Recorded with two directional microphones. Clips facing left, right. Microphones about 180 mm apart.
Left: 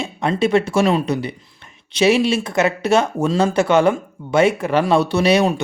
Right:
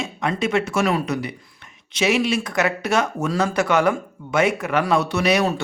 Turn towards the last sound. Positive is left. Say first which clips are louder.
# left 4 dB
turn(degrees=30)  # may be behind; listen again after turning